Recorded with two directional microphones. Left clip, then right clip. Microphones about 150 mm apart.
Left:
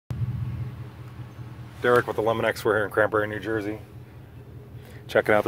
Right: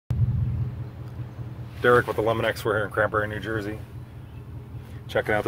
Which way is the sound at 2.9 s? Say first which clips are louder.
Left 1 dB; 75° left (ahead or behind).